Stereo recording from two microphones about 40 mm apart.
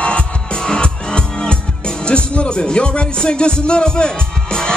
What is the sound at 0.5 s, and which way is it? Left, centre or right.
Music, centre.